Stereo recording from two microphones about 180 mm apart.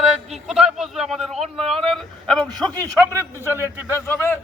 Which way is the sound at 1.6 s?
30° right (ahead or behind).